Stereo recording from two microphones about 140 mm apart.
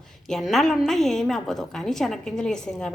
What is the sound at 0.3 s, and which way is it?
A woman's voice, centre (ahead or behind).